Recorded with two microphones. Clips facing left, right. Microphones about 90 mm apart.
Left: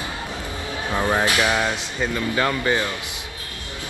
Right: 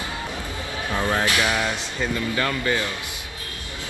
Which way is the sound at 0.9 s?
20° left (ahead or behind).